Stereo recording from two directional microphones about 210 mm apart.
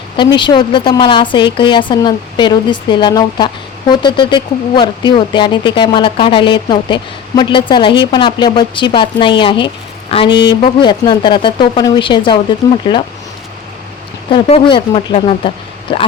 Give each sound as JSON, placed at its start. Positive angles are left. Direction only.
{"t": 0.2, "sound": "a woman's voice", "side_deg": 20}
{"t": 14.3, "sound": "a woman's voice", "side_deg": 25}